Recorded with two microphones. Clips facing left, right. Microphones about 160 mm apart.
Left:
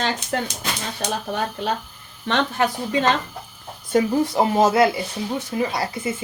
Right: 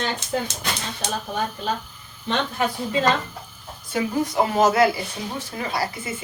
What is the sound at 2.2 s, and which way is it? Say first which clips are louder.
Speech: left 3 dB; 80° left.